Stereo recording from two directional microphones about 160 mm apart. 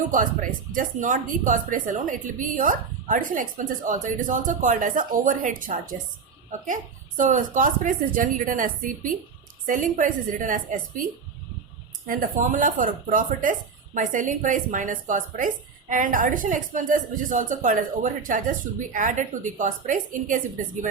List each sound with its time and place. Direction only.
0.1 s speech: 55° right (ahead or behind)
7.2 s speech: 50° right (ahead or behind)